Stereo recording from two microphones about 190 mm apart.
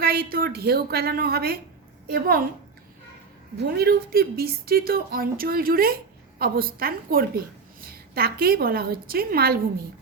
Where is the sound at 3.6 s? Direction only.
55° right (ahead or behind).